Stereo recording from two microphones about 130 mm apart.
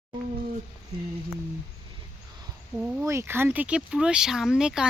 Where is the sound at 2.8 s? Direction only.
10° right (ahead or behind).